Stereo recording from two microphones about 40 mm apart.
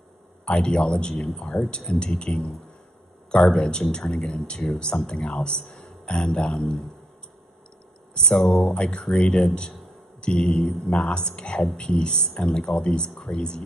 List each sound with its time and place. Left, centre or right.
0.5 s speech: left
8.4 s speech: centre